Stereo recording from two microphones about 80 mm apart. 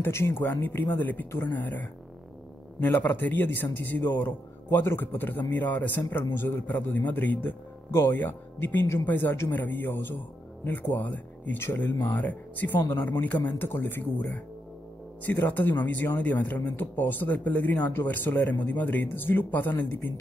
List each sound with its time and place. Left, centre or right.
0.0 s speech: left